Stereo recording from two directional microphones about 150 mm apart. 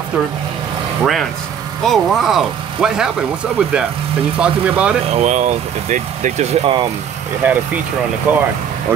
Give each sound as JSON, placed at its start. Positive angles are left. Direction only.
{"t": 1.8, "sound": "speech", "side_deg": 0}
{"t": 5.1, "sound": "speech", "side_deg": -50}
{"t": 7.4, "sound": "speech", "side_deg": -15}